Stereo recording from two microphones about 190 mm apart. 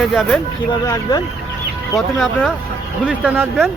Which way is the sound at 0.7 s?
20° left (ahead or behind).